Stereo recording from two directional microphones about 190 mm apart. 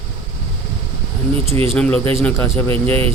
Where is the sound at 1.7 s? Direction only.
5° left (ahead or behind).